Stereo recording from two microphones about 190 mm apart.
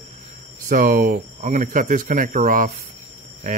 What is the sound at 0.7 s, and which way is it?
Speech, 45° right (ahead or behind).